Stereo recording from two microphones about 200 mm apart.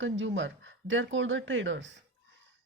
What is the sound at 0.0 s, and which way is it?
A woman's voice, 70° right (ahead or behind).